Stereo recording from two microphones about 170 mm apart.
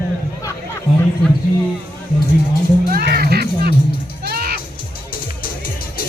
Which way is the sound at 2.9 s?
65° right (ahead or behind).